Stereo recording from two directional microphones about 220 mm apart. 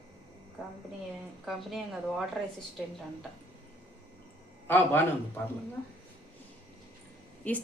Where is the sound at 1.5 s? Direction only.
Centre (ahead or behind).